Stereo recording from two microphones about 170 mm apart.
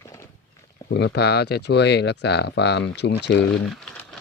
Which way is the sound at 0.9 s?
90° left.